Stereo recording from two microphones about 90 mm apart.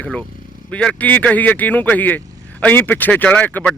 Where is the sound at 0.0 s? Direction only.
15° left (ahead or behind).